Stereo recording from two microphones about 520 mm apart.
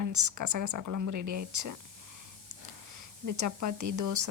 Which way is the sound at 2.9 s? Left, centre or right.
Right.